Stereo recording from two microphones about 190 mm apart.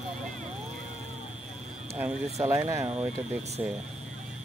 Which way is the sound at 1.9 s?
15° right (ahead or behind).